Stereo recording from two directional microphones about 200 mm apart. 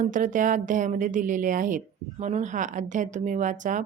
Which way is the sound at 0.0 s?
40° right (ahead or behind).